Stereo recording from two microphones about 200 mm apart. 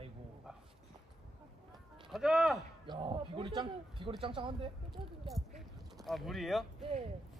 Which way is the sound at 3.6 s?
25° right (ahead or behind).